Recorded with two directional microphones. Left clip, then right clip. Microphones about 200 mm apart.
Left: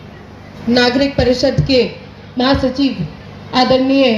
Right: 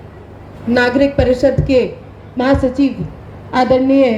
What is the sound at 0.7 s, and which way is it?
A woman's voice, 20° left (ahead or behind).